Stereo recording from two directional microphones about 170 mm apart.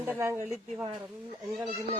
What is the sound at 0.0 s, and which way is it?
Speech, 15° right (ahead or behind).